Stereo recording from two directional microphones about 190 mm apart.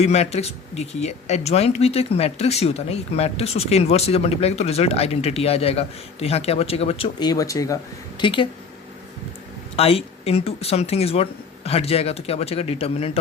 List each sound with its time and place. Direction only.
0.0 s speech: 35° left (ahead or behind)
9.7 s speech: 30° left (ahead or behind)